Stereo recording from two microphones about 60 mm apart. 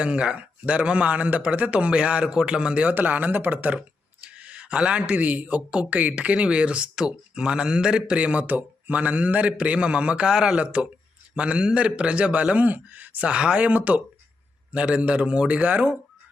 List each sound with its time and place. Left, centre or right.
0.0 s a man's voice: centre
2.9 s a man's voice: right